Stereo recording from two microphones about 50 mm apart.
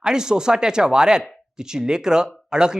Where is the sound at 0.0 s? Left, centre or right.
Centre.